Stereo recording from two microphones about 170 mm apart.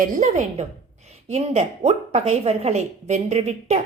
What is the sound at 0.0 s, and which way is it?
A woman's voice, 50° right (ahead or behind).